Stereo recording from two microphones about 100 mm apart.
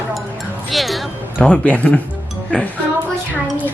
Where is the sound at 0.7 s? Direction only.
Centre (ahead or behind).